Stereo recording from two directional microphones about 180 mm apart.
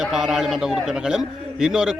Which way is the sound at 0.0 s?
Centre (ahead or behind).